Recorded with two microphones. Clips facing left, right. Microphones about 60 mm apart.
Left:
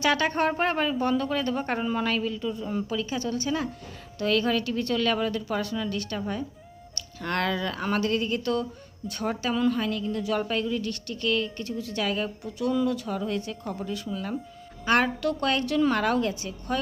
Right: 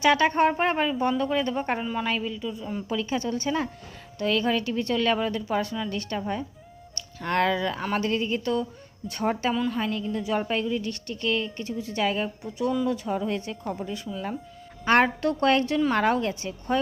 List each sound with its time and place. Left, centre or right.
0.0 s a woman's voice: right
1.8 s a woman's voice: centre
2.0 s speech: centre
2.9 s a woman's voice: right
9.0 s a woman's voice: right
14.1 s speech: centre
14.8 s a woman's voice: right